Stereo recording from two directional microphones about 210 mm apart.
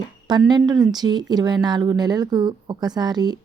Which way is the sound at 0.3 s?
20° right (ahead or behind).